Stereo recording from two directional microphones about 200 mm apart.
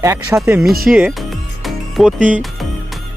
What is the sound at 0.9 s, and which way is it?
Speech, centre (ahead or behind).